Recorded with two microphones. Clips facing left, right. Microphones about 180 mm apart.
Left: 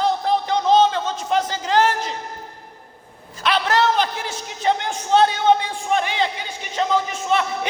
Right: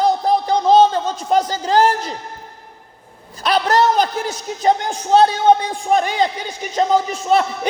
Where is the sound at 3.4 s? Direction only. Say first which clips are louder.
Right 4 dB; 40° right (ahead or behind).